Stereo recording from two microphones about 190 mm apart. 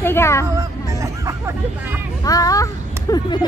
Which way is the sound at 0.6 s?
15° right (ahead or behind).